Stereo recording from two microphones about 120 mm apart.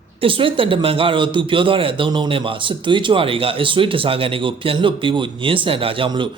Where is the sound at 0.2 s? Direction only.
45° right (ahead or behind).